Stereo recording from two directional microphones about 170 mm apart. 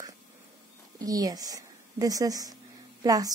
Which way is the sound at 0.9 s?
20° right (ahead or behind).